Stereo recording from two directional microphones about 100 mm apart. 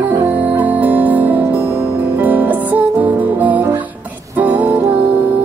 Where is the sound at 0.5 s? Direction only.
15° right (ahead or behind).